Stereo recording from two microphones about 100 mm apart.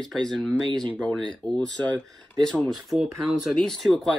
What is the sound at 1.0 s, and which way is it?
Speech, 5° left (ahead or behind).